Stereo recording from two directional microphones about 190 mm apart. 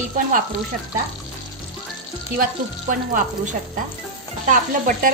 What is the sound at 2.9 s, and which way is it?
A woman's voice, 45° right (ahead or behind).